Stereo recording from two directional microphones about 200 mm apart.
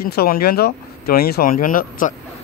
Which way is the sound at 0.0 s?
50° left (ahead or behind).